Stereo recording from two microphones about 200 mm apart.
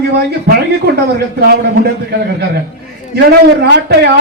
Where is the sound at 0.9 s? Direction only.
55° right (ahead or behind).